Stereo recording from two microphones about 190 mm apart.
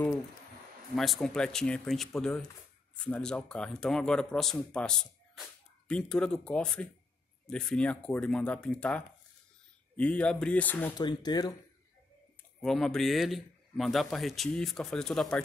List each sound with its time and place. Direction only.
0.9 s a man's voice: centre (ahead or behind)
11.0 s speech: 20° left (ahead or behind)
12.6 s a man's voice: centre (ahead or behind)